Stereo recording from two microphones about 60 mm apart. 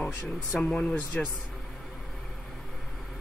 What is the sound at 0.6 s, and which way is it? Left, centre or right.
Speech, centre.